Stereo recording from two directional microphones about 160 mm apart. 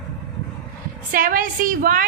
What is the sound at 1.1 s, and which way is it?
Speech, 60° right (ahead or behind).